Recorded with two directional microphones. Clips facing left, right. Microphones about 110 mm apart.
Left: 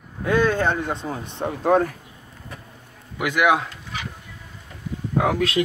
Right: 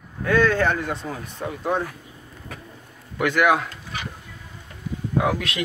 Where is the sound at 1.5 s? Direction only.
40° left (ahead or behind).